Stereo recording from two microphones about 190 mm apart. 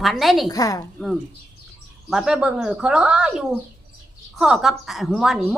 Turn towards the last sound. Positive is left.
turn(degrees=0)  # may be behind; listen again after turning